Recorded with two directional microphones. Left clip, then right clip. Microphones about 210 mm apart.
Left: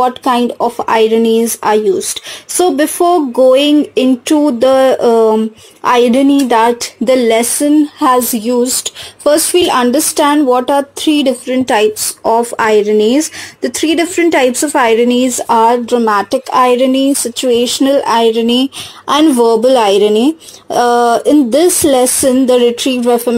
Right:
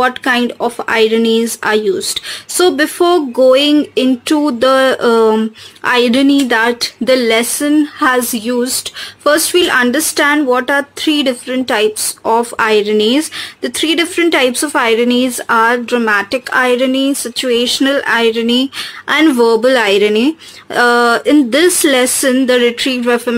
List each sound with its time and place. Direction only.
0.0 s speech: 10° left (ahead or behind)
0.8 s a sound: 5° left (ahead or behind)
9.2 s speech: 10° left (ahead or behind)
11.0 s a sound: 10° left (ahead or behind)
15.6 s speech: 10° left (ahead or behind)
20.2 s speech: 20° right (ahead or behind)
21.3 s speech: 5° left (ahead or behind)
23.0 s speech: 20° right (ahead or behind)